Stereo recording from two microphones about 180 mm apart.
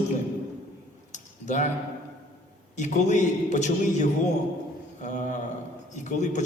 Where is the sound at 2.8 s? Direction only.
40° left (ahead or behind).